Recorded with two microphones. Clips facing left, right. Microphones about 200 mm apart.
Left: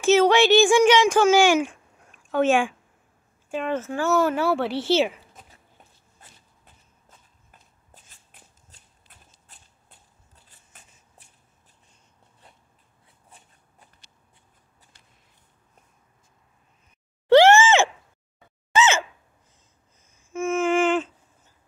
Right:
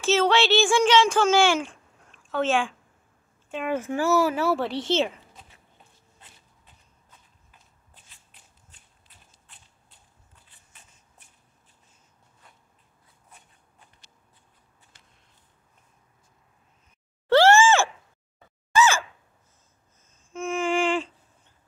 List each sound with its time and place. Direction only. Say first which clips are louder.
0.0 s speech: left 4 dB; 15° left (ahead or behind)
3.6 s speech: right 1 dB; 10° right (ahead or behind); by 5.1 s 10° left (ahead or behind)
8.3 s shuffling cards: left 6 dB; 50° left (ahead or behind)
9.1 s a sound: left 3 dB; 50° left (ahead or behind)
9.5 s biting: left 1 dB; 40° left (ahead or behind)
17.3 s groan: left 3 dB; 15° left (ahead or behind)
18.7 s sigh: even; 20° left (ahead or behind)
20.2 s music: left 4 dB; 5° left (ahead or behind)